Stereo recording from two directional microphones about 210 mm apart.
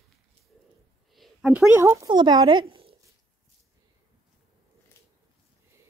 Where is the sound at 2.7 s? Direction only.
25° right (ahead or behind).